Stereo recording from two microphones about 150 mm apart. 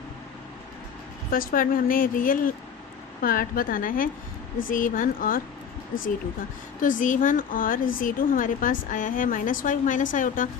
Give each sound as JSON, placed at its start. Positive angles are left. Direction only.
{"t": 1.3, "sound": "speech", "side_deg": 70}
{"t": 6.8, "sound": "speech", "side_deg": 60}